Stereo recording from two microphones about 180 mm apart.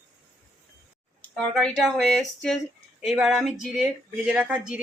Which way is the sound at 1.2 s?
5° left (ahead or behind).